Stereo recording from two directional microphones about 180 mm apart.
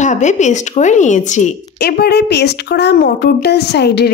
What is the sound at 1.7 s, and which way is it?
Speech, 60° left (ahead or behind).